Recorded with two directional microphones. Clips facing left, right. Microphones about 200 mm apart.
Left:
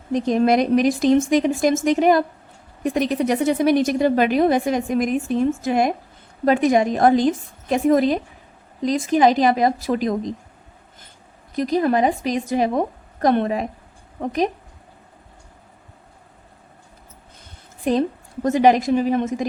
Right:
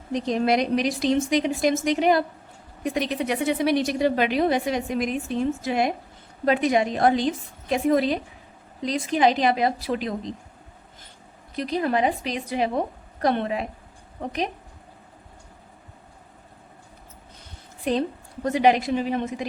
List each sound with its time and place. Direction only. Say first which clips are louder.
0.1 s speech: left 5 dB; 50° left (ahead or behind)
11.5 s speech: left 5 dB; 45° left (ahead or behind)
18.4 s speech: left 4 dB; 45° left (ahead or behind)